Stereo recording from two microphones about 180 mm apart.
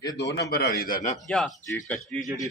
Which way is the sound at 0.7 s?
50° left (ahead or behind).